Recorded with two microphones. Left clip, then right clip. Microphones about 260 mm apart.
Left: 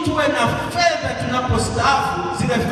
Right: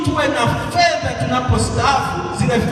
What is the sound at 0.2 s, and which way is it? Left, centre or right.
Music, right.